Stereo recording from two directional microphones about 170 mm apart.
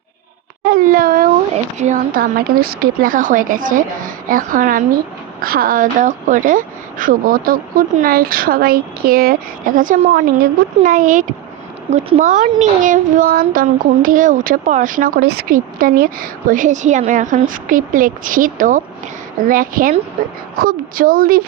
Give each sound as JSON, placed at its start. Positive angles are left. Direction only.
{"t": 0.6, "sound": "a woman's voice", "side_deg": -60}
{"t": 1.5, "sound": "a woman's voice", "side_deg": -45}
{"t": 11.9, "sound": "a woman's voice", "side_deg": -40}